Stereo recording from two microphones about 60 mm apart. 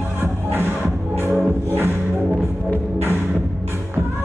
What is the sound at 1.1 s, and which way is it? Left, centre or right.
Music, right.